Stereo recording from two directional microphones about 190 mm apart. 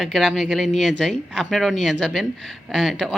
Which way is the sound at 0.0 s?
Centre (ahead or behind).